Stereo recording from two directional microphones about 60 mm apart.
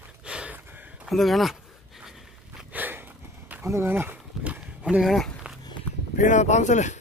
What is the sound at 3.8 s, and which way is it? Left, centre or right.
Speech, right.